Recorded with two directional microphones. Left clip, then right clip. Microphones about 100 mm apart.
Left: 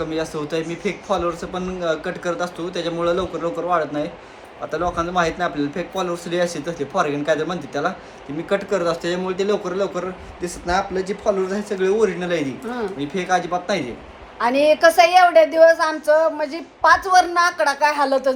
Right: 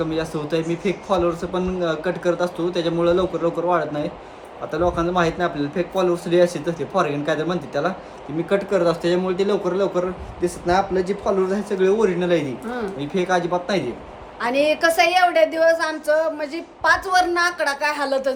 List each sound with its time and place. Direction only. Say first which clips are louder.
0.0 s speech: even; 30° right (ahead or behind)
8.4 s speech: right 1 dB; 40° right (ahead or behind)
14.3 s a woman's voice: left 3 dB; 5° left (ahead or behind)